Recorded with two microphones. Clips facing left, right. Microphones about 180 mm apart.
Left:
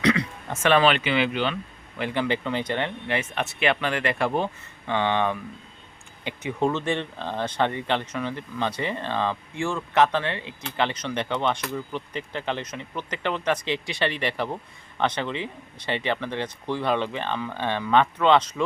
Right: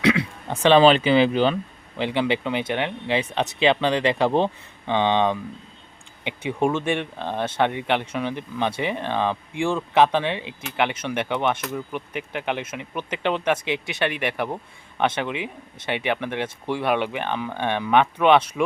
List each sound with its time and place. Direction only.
0.4 s a sound: 20° right (ahead or behind)
0.8 s speech: 35° right (ahead or behind)
2.0 s speech: 20° right (ahead or behind)
6.6 s speech: 10° right (ahead or behind)